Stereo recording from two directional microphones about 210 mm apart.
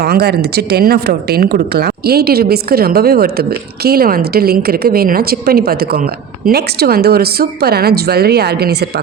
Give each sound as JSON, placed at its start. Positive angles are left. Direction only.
{"t": 0.0, "sound": "a woman's voice", "side_deg": -50}